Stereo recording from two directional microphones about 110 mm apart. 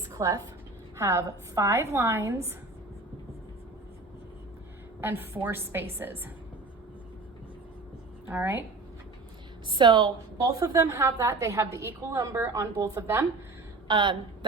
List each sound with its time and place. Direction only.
0.1 s a woman's voice: 30° right (ahead or behind)
4.9 s a woman's voice: 20° right (ahead or behind)
8.3 s a woman's voice: 20° right (ahead or behind)
9.6 s a woman's voice: 45° right (ahead or behind)
10.4 s a woman's voice: 30° right (ahead or behind)
13.8 s a woman's voice: 45° right (ahead or behind)